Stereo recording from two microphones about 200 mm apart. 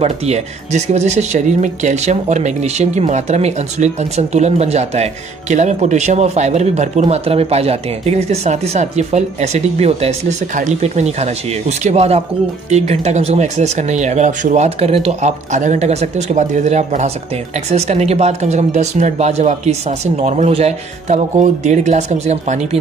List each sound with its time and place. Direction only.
0.0 s speech: 35° right (ahead or behind)